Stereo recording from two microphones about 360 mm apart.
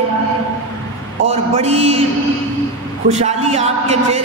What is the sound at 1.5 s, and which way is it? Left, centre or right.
Speech, centre.